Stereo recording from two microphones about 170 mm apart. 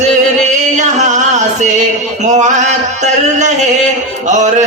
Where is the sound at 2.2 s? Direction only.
45° right (ahead or behind).